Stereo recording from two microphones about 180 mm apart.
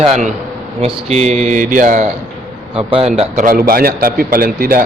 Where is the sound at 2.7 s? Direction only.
35° right (ahead or behind).